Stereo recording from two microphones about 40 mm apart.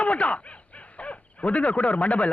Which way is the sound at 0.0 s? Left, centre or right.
Left.